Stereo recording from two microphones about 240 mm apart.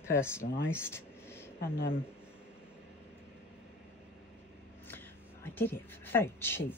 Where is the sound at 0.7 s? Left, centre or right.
Centre.